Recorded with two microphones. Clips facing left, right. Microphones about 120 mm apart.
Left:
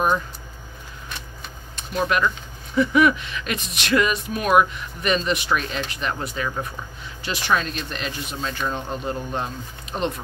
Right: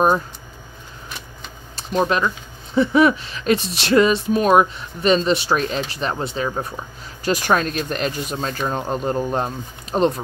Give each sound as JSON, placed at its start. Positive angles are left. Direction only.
{"t": 1.8, "sound": "speech", "side_deg": -35}
{"t": 7.2, "sound": "speech", "side_deg": -45}